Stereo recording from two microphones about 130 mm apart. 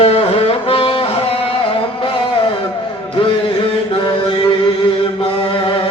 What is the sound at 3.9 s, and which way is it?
Mantra, 45° left (ahead or behind).